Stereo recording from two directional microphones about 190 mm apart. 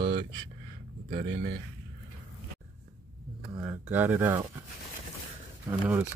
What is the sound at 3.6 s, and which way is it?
Speech, 10° right (ahead or behind).